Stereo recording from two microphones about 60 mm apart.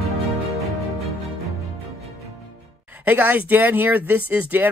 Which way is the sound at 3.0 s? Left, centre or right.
Right.